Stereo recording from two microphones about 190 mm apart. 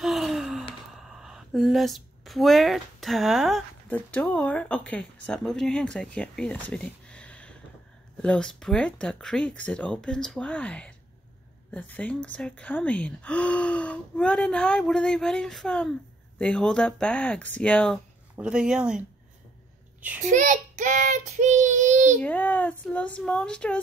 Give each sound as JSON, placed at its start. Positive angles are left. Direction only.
{"t": 0.0, "sound": "gasp", "side_deg": 0}
{"t": 3.9, "sound": "speech", "side_deg": 10}
{"t": 20.2, "sound": "child singing", "side_deg": -40}
{"t": 22.2, "sound": "speech", "side_deg": 10}